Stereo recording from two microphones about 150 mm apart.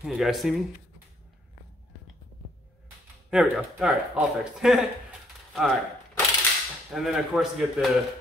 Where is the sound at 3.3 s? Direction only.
5° right (ahead or behind).